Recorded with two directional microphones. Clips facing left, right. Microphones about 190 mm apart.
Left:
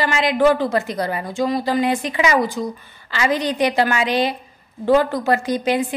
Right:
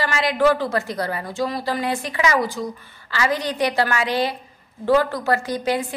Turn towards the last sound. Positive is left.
turn(degrees=20)  # may be behind; listen again after turning